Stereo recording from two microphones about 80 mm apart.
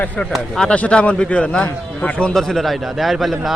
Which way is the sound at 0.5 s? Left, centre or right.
Centre.